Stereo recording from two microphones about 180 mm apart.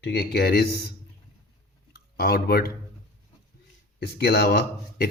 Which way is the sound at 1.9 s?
60° left (ahead or behind).